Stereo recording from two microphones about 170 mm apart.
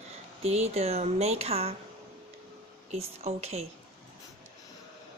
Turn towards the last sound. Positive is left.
turn(degrees=-40)  # may be behind; listen again after turning